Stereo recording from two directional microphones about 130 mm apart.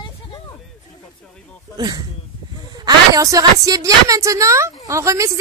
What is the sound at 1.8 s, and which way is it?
A woman's voice, 30° right (ahead or behind).